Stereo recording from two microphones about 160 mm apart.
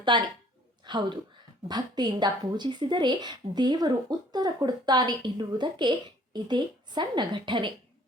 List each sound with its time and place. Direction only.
0.1 s a woman's voice: 30° right (ahead or behind)